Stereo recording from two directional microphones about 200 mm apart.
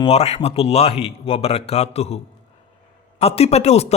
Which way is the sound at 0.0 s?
30° left (ahead or behind).